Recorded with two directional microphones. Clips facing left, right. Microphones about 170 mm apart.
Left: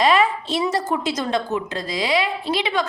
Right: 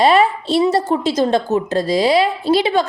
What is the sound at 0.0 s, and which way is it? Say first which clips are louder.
A woman's voice: right 4 dB; 35° right (ahead or behind).